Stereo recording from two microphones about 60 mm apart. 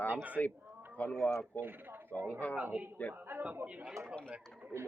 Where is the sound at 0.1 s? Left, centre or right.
Right.